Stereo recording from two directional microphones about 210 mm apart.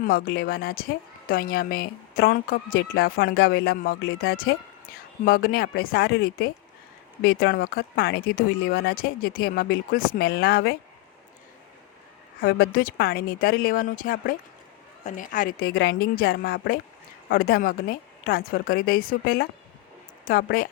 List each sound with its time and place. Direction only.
0.0 s a woman's voice: 45° left (ahead or behind)
12.4 s a woman's voice: 45° left (ahead or behind)